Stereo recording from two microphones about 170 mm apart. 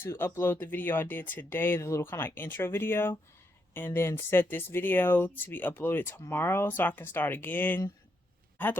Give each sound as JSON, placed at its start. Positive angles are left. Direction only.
{"t": 0.0, "sound": "speech", "side_deg": 15}